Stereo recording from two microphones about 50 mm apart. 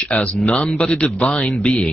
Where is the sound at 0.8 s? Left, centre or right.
Centre.